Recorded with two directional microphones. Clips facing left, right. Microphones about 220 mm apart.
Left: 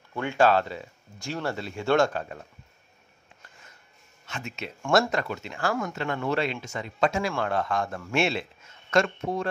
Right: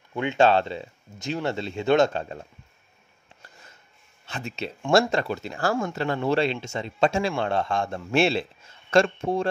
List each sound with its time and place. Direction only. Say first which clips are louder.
0.1 s speech: right 2 dB; 20° right (ahead or behind)
4.3 s speech: right 4 dB; 30° right (ahead or behind)